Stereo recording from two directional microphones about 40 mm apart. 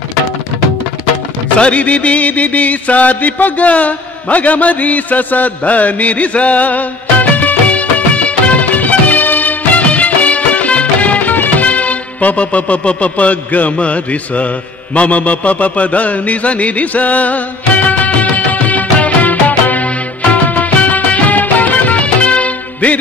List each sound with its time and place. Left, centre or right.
1.6 s music: left
13.7 s speech: left
15.0 s a sound: left